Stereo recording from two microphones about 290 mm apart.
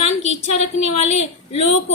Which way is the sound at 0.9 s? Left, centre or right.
Left.